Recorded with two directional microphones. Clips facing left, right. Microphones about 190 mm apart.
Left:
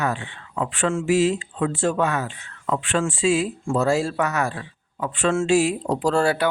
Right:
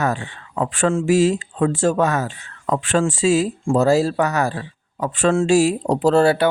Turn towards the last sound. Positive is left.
turn(degrees=-25)  # may be behind; listen again after turning